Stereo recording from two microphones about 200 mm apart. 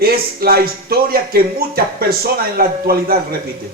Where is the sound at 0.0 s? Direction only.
50° right (ahead or behind).